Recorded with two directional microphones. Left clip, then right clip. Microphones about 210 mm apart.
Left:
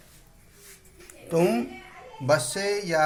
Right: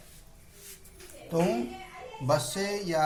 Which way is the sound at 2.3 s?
45° left (ahead or behind).